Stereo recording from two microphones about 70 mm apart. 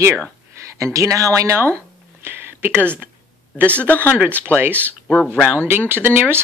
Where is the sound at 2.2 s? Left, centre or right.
Right.